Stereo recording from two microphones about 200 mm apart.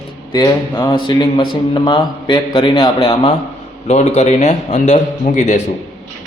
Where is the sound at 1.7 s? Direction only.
25° left (ahead or behind).